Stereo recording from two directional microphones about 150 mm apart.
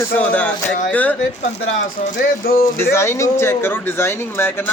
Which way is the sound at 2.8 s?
15° left (ahead or behind).